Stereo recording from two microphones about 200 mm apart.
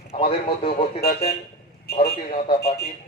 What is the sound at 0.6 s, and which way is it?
Speech, 45° left (ahead or behind).